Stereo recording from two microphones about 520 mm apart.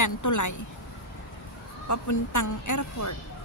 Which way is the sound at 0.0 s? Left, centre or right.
Left.